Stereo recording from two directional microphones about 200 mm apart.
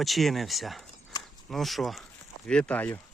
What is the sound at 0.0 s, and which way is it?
Speech, centre (ahead or behind).